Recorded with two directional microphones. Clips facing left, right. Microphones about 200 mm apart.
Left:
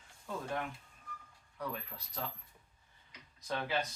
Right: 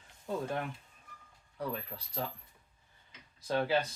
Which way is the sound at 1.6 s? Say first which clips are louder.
Right 4 dB; 30° right (ahead or behind).